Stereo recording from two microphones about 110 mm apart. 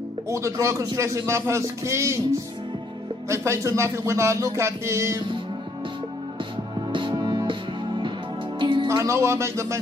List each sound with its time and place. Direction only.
0.3 s speech: 25° right (ahead or behind)
6.9 s music: 45° right (ahead or behind)
8.8 s speech: 25° right (ahead or behind)